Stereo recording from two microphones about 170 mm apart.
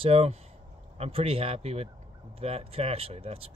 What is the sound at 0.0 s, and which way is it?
Speech, 35° right (ahead or behind).